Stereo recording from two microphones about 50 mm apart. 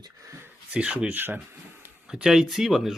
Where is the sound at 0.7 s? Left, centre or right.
Right.